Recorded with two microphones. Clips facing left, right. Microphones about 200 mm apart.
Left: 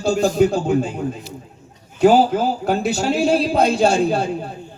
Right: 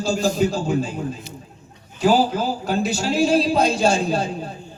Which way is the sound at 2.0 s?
60° left (ahead or behind).